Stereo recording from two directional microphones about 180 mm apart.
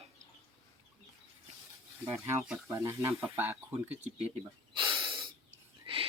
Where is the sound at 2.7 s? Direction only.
15° right (ahead or behind).